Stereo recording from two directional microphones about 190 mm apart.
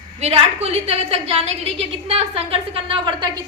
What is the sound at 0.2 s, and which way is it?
A woman's voice, 30° right (ahead or behind).